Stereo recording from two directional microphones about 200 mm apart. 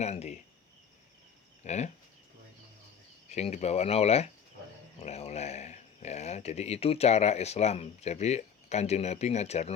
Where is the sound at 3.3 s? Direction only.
35° left (ahead or behind).